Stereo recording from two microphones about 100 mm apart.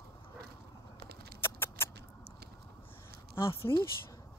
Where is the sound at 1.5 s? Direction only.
25° left (ahead or behind).